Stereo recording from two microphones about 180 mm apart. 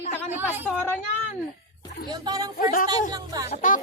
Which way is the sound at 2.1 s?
20° right (ahead or behind).